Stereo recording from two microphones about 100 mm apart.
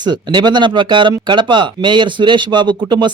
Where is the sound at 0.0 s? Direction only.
50° right (ahead or behind).